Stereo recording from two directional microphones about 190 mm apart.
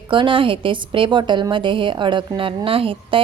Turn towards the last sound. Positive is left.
turn(degrees=-30)  # may be behind; listen again after turning